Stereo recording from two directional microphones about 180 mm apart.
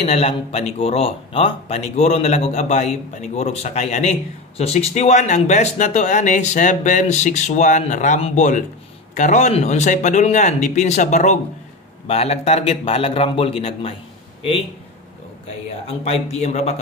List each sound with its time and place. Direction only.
0.0 s speech: 35° left (ahead or behind)
15.4 s speech: 35° left (ahead or behind)